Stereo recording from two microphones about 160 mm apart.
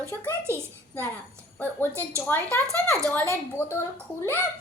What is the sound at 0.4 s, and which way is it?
Speech, 15° right (ahead or behind).